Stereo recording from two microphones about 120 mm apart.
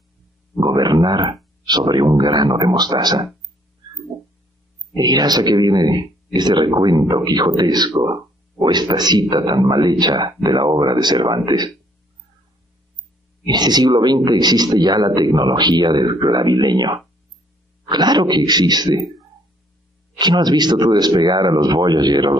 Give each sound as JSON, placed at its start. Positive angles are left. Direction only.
{"t": 0.6, "sound": "a sound", "side_deg": -35}
{"t": 1.7, "sound": "a man's voice", "side_deg": -35}
{"t": 4.9, "sound": "a man's voice", "side_deg": -35}
{"t": 13.5, "sound": "a man's voice", "side_deg": -35}
{"t": 20.2, "sound": "a man's voice", "side_deg": -35}